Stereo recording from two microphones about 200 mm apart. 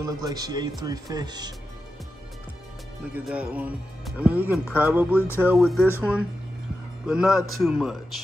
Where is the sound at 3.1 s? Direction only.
5° right (ahead or behind).